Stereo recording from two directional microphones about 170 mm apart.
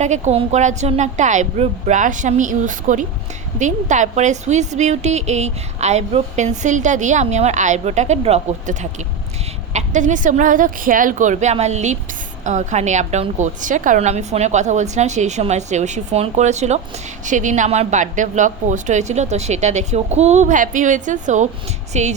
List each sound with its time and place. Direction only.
0.0 s a woman's voice: 40° right (ahead or behind)
21.9 s music: 40° right (ahead or behind)